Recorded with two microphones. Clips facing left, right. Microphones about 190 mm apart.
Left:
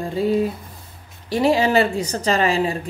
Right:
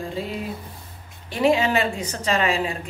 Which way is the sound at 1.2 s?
35° left (ahead or behind).